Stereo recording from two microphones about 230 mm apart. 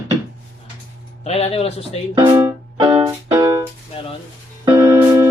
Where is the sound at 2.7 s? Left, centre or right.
Centre.